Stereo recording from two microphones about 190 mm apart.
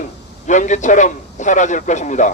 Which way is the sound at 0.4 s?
40° left (ahead or behind).